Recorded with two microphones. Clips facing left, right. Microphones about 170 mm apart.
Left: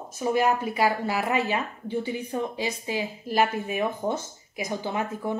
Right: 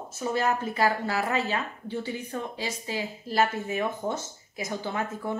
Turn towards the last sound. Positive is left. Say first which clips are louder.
# left 2 dB
turn(degrees=15)  # may be behind; listen again after turning